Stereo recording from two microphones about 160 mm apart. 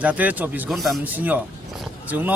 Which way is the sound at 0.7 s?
Centre (ahead or behind).